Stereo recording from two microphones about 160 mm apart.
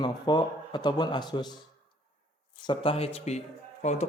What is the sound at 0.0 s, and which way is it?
Speech, 25° left (ahead or behind).